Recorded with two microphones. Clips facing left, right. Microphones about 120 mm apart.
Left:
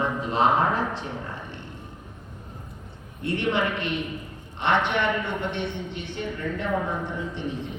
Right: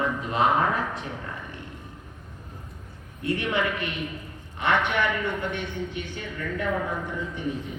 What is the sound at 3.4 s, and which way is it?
A man's voice, 25° left (ahead or behind).